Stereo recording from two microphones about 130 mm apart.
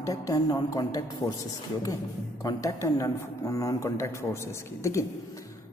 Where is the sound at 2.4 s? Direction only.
25° left (ahead or behind).